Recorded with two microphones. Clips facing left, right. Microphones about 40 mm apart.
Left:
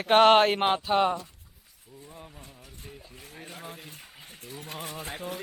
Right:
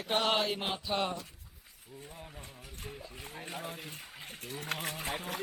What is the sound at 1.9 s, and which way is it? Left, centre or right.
Speech, right.